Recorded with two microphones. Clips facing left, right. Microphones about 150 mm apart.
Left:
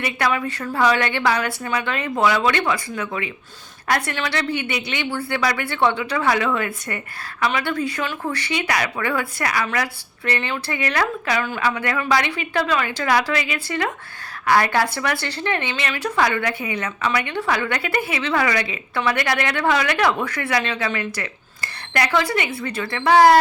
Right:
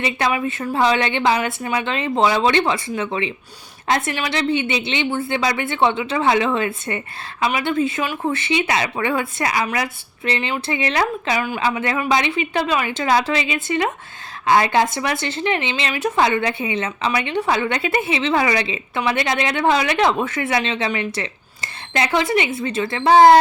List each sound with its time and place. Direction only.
0.0 s speech: 20° right (ahead or behind)